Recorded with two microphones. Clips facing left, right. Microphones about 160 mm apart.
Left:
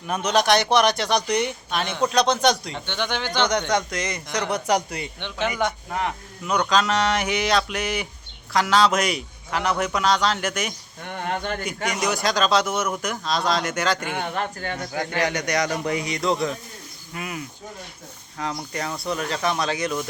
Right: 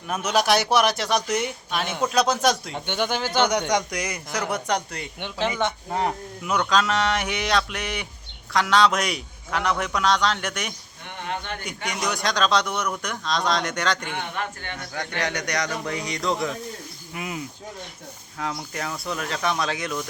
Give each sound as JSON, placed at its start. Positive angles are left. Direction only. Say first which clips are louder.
{"t": 0.1, "sound": "a man's voice", "louder": "left 2 dB", "side_deg": -5}
{"t": 5.6, "sound": "a man's voice", "louder": "right 1 dB", "side_deg": -30}
{"t": 6.4, "sound": "speech", "louder": "left 1 dB", "side_deg": 0}
{"t": 11.3, "sound": "a man's voice", "louder": "left 4 dB", "side_deg": 45}
{"t": 11.9, "sound": "speech", "louder": "left 2 dB", "side_deg": 0}
{"t": 14.1, "sound": "speech", "louder": "left 3 dB", "side_deg": 45}
{"t": 15.2, "sound": "speech", "louder": "left 3 dB", "side_deg": 0}
{"t": 17.2, "sound": "speech", "louder": "even", "side_deg": -20}
{"t": 18.3, "sound": "speech", "louder": "left 1 dB", "side_deg": 0}